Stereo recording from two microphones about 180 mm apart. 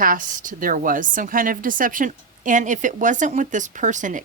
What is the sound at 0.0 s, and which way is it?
A woman's voice, 50° right (ahead or behind).